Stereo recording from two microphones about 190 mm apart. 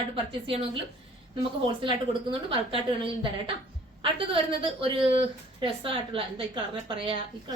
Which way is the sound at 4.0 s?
30° right (ahead or behind).